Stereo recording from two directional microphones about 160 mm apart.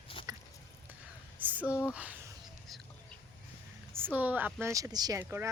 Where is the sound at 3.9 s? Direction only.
10° right (ahead or behind).